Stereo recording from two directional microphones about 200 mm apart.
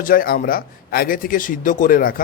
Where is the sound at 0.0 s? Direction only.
45° left (ahead or behind).